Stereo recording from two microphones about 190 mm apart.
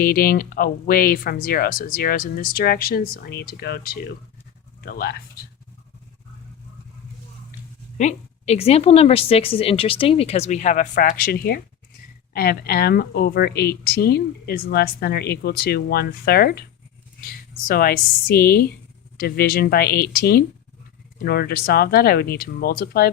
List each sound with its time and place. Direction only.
0.0 s speech: 50° left (ahead or behind)
7.9 s a woman's voice: 35° left (ahead or behind); by 16.6 s 55° left (ahead or behind)
17.7 s speech: 50° left (ahead or behind)